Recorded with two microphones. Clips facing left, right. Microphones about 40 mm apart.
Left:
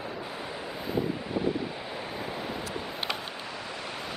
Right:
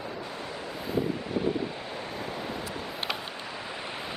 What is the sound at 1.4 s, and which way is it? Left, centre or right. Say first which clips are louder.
Wind: even; centre.